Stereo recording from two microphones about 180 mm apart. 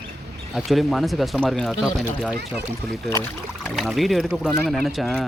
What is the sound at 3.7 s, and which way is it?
Speech, centre (ahead or behind).